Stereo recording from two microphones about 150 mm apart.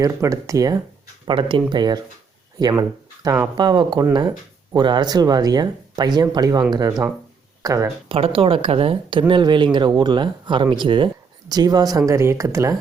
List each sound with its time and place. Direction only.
0.0 s speech: 20° right (ahead or behind)
1.3 s speech: 35° right (ahead or behind)
8.1 s speech: 35° right (ahead or behind); by 12.7 s 20° right (ahead or behind)